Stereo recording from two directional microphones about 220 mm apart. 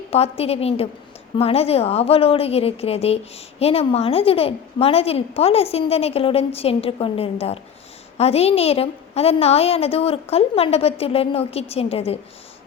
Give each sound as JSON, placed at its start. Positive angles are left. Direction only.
{"t": 0.1, "sound": "a woman's voice", "side_deg": 25}